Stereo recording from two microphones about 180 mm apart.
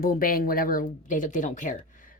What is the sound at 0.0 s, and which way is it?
Speech, 50° left (ahead or behind).